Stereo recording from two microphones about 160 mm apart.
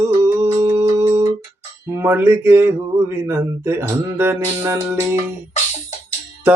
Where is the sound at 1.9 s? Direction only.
15° right (ahead or behind).